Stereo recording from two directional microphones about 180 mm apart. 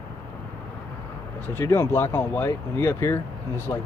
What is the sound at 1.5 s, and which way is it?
Speech, 15° left (ahead or behind).